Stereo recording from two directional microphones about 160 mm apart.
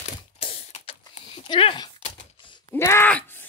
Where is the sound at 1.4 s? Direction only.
30° left (ahead or behind).